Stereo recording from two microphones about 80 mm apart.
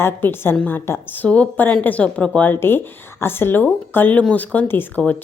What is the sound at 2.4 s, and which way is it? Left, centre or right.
Speech, left.